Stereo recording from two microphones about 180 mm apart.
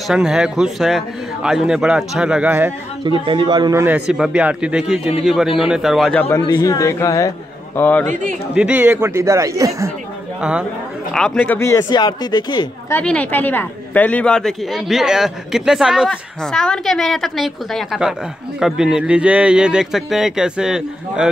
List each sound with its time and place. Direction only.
0.1 s a woman's voice: 5° right (ahead or behind)
3.0 s a man's voice: 30° right (ahead or behind)
3.8 s a woman's voice: 5° right (ahead or behind)
6.3 s a man's voice: 20° left (ahead or behind)
8.1 s a man's voice: 45° right (ahead or behind)
8.5 s speech: 10° right (ahead or behind)
11.1 s speech: 5° left (ahead or behind); by 12.6 s 25° left (ahead or behind)
12.9 s a woman's voice: 10° left (ahead or behind)